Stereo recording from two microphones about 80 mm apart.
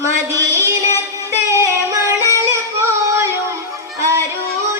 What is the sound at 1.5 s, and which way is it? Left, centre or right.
Singing, right.